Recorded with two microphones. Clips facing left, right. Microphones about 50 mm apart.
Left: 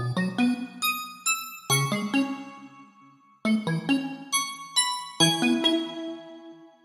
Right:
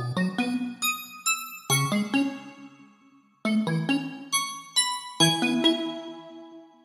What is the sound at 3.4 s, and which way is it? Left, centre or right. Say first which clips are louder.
Music: even; centre.